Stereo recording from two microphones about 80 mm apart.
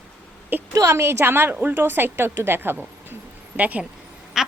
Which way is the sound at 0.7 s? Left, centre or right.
Right.